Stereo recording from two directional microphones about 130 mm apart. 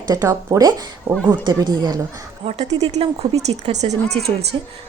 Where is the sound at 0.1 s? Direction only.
25° right (ahead or behind).